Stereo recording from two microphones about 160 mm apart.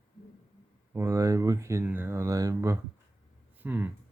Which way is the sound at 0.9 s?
20° right (ahead or behind).